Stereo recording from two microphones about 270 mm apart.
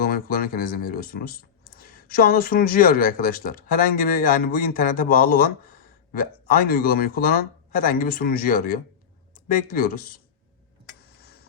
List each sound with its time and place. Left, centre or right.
0.0 s speech: left
6.5 s speech: left
11.2 s a sound: left